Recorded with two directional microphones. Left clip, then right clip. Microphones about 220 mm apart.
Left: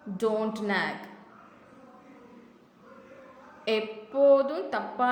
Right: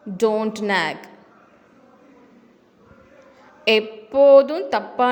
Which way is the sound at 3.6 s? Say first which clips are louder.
Right 10 dB; 40° right (ahead or behind).